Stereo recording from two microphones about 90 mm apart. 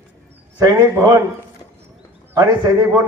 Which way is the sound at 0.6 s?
45° right (ahead or behind).